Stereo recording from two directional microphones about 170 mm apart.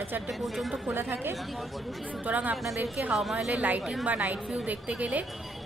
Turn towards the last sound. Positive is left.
turn(degrees=0)  # may be behind; listen again after turning